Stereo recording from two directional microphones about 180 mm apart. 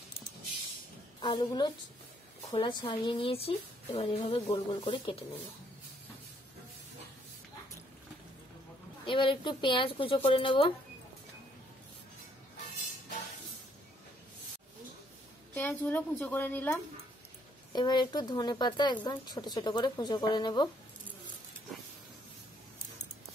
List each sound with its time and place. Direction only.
1.2 s speech: 25° left (ahead or behind)
9.0 s speech: 30° left (ahead or behind)
15.5 s a woman's voice: 10° left (ahead or behind)
17.7 s speech: 25° left (ahead or behind)